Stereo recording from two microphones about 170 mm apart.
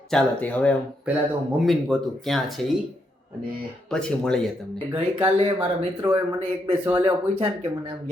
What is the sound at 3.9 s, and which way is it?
Speech, 5° left (ahead or behind).